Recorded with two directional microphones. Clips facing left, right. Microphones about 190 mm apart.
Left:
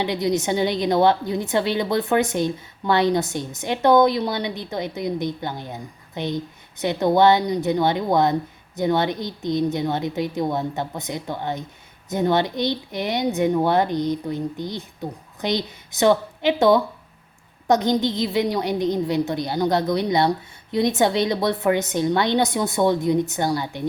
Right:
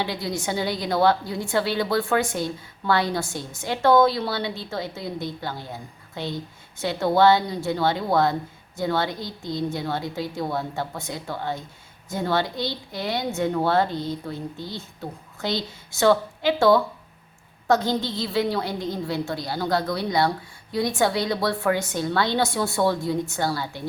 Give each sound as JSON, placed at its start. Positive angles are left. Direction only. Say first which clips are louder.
{"t": 0.0, "sound": "a woman's voice", "louder": "left 6 dB", "side_deg": 20}